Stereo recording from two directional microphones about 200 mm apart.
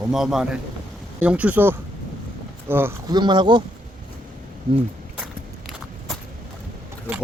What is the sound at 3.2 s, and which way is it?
Speech, 20° right (ahead or behind).